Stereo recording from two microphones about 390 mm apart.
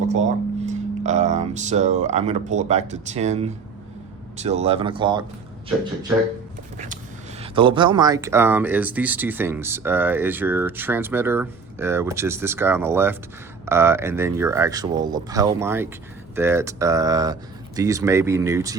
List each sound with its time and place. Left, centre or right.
0.1 s speech: centre
6.7 s a sound: centre
7.4 s speech: centre